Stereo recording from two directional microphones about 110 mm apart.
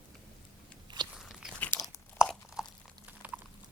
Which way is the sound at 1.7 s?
20° left (ahead or behind).